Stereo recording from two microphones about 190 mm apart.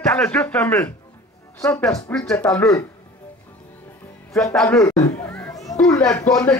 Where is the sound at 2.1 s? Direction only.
10° left (ahead or behind).